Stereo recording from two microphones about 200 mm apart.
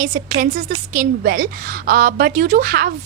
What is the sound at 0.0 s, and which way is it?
A woman's voice, 45° right (ahead or behind).